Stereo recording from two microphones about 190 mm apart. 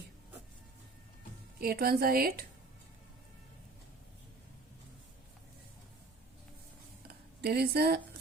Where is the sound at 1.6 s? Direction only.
55° right (ahead or behind).